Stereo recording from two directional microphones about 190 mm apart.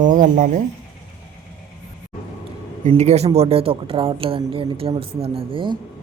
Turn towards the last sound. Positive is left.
turn(degrees=-25)  # may be behind; listen again after turning